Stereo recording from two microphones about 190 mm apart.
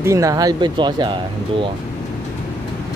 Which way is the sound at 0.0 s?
15° right (ahead or behind).